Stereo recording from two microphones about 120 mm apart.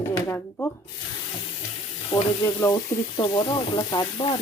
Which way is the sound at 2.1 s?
40° left (ahead or behind).